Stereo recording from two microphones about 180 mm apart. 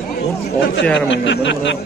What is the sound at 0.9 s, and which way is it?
Speech, 90° left.